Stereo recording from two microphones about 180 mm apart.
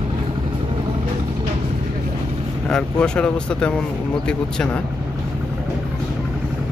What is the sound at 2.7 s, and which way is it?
Speech, 5° left (ahead or behind).